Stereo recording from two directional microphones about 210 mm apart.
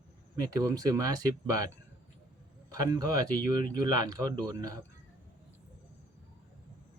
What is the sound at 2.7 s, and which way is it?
Speech, 15° right (ahead or behind).